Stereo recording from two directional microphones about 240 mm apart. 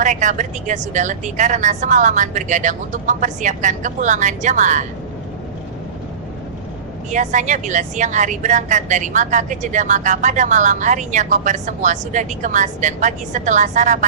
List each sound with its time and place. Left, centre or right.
0.0 s a woman's voice: right
7.1 s a woman's voice: right